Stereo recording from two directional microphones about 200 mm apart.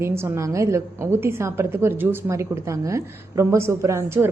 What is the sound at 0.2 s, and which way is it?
A woman's voice, 15° right (ahead or behind).